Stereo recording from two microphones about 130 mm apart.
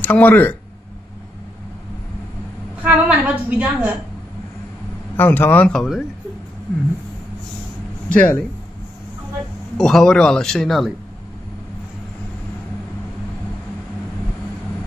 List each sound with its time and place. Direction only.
0.0 s speech: 15° left (ahead or behind)
2.8 s a woman's voice: 10° right (ahead or behind)
5.1 s speech: 15° left (ahead or behind)
5.8 s speech: 5° right (ahead or behind)
8.1 s speech: 10° left (ahead or behind)
9.8 s speech: 5° left (ahead or behind)